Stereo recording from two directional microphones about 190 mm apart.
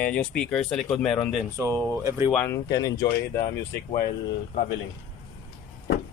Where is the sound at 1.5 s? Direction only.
15° right (ahead or behind).